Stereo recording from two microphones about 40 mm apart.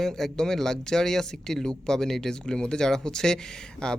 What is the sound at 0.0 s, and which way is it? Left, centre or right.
Speech, centre.